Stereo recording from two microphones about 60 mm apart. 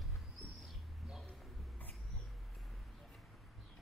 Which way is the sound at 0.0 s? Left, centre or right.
Centre.